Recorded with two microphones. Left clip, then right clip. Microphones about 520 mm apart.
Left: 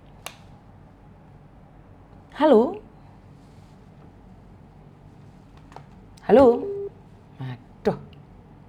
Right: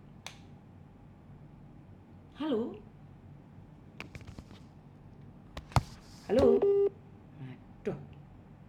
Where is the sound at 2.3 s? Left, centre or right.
Left.